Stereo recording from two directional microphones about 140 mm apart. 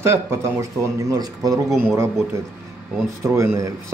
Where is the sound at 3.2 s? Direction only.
20° right (ahead or behind).